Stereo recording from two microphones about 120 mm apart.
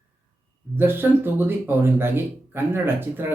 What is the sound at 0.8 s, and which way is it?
A man's voice, 20° right (ahead or behind).